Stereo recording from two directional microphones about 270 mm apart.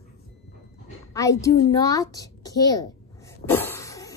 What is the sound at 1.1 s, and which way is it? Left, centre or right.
A woman's voice, centre.